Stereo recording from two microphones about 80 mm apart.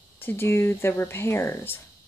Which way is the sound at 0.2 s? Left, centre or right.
Left.